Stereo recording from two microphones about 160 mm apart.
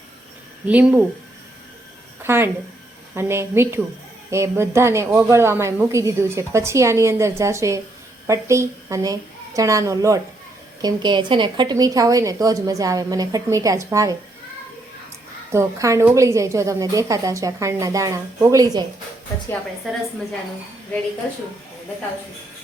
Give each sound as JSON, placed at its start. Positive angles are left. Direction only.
{"t": 0.7, "sound": "a woman's voice", "side_deg": -10}
{"t": 2.2, "sound": "a sound", "side_deg": -15}
{"t": 3.2, "sound": "a woman's voice", "side_deg": -15}
{"t": 15.5, "sound": "a woman's voice", "side_deg": -20}